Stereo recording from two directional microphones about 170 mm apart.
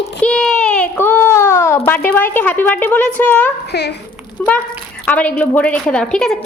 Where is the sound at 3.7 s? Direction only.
75° left (ahead or behind).